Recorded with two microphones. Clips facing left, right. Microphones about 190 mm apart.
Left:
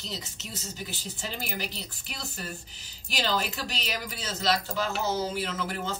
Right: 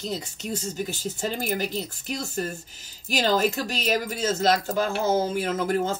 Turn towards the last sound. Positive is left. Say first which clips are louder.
# right 8 dB
turn(degrees=-45)  # may be behind; listen again after turning